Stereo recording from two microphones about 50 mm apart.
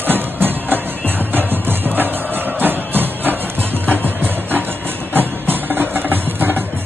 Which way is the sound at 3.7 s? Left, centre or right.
Left.